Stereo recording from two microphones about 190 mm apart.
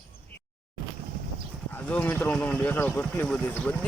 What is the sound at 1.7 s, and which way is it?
Speech, 10° left (ahead or behind).